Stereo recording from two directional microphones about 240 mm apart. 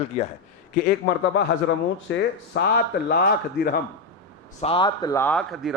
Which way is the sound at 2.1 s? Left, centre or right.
Left.